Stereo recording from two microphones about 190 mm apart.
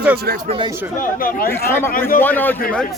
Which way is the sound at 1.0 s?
50° left (ahead or behind).